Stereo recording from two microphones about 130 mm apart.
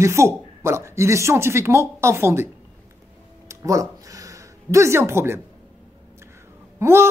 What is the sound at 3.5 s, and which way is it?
Speech, 25° right (ahead or behind).